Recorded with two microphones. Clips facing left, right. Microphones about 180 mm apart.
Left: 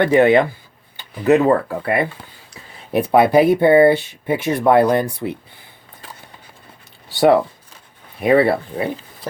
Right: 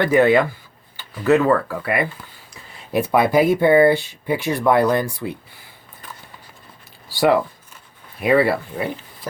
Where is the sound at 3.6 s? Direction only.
25° left (ahead or behind).